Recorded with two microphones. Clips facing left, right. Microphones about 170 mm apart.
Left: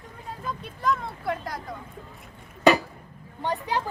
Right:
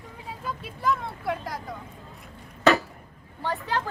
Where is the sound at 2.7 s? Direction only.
15° left (ahead or behind).